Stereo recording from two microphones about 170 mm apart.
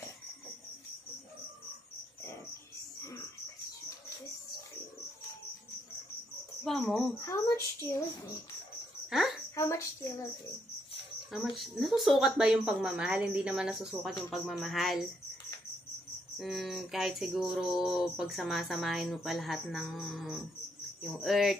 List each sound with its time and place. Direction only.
6.6 s cricket: centre (ahead or behind)
7.2 s a woman's voice: 15° left (ahead or behind)
9.6 s a woman's voice: 15° left (ahead or behind)
11.3 s speech: centre (ahead or behind)
16.3 s speech: centre (ahead or behind)